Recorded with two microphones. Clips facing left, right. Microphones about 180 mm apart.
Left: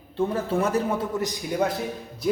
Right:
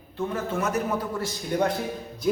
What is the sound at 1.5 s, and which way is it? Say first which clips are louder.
Speech: right 1 dB; 5° left (ahead or behind).